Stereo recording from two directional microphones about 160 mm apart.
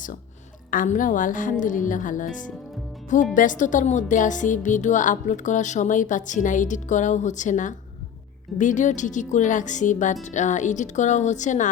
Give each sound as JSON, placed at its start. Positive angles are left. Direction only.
{"t": 0.7, "sound": "a woman's voice", "side_deg": 55}